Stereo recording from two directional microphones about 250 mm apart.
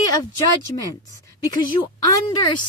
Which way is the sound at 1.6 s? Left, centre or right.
Centre.